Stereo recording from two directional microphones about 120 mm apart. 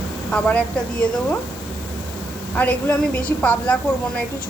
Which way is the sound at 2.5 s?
15° left (ahead or behind).